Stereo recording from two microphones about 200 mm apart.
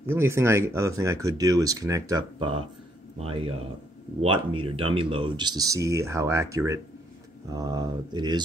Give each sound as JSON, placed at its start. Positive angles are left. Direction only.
{"t": 0.1, "sound": "speech", "side_deg": -10}
{"t": 4.6, "sound": "speech", "side_deg": -25}